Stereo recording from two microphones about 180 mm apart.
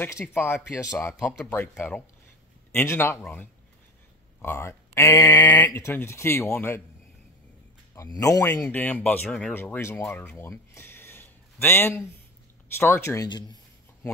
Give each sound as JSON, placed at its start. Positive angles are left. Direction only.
{"t": 0.0, "sound": "speech", "side_deg": 15}
{"t": 7.9, "sound": "speech", "side_deg": 15}